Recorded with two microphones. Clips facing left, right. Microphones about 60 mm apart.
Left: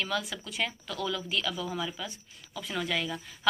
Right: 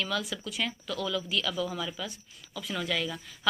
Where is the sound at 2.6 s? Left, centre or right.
Left.